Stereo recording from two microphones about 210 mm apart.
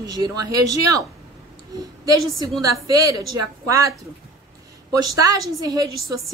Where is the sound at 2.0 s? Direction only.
15° right (ahead or behind).